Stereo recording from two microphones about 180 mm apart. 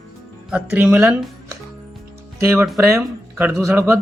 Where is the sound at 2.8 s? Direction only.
15° right (ahead or behind).